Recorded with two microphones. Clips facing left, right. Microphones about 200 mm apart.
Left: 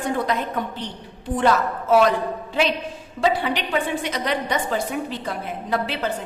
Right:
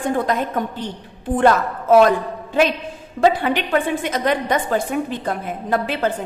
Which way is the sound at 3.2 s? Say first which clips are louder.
Right 5 dB; 55° right (ahead or behind).